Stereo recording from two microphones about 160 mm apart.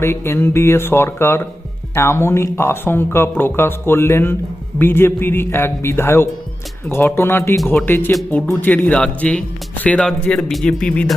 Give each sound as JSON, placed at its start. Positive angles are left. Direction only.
{"t": 0.0, "sound": "speech", "side_deg": 15}